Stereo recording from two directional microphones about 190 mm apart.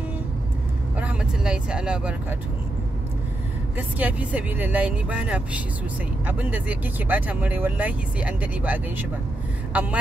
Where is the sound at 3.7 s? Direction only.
10° right (ahead or behind).